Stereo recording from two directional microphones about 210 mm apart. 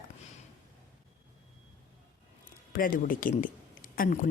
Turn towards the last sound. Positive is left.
turn(degrees=40)  # may be behind; listen again after turning